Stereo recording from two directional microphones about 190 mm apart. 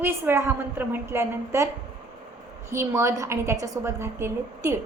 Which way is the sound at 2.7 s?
15° right (ahead or behind).